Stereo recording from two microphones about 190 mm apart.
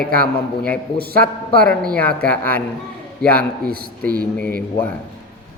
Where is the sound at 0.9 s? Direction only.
55° right (ahead or behind).